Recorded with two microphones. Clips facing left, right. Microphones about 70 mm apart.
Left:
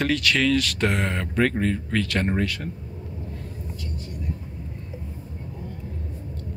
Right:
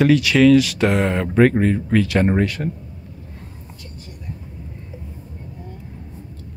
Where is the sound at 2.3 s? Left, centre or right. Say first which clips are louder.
Right 6 dB; right.